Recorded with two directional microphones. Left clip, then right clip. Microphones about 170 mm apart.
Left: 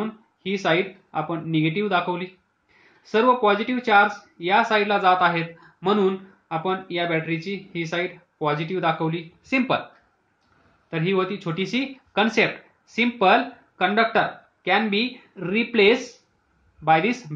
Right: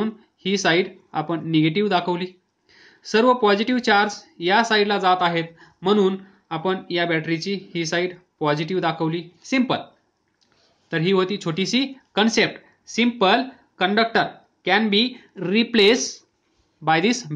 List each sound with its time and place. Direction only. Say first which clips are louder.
0.0 s speech: right 4 dB; 40° right (ahead or behind)
10.9 s speech: right 3 dB; 40° right (ahead or behind)